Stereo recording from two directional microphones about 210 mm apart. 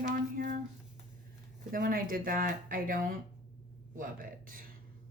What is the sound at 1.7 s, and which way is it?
Speech, 40° right (ahead or behind).